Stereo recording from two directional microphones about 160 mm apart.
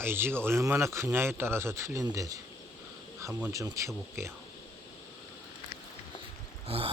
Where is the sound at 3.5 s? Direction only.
20° right (ahead or behind).